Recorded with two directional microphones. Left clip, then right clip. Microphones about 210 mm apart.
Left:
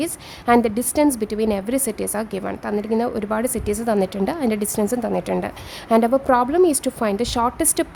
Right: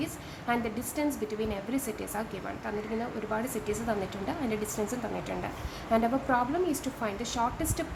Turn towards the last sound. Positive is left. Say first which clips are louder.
# left 10 dB
turn(degrees=55)  # may be behind; listen again after turning